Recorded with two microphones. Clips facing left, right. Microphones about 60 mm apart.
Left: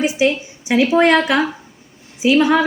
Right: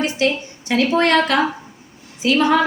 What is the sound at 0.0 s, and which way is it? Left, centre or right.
A woman's voice, centre.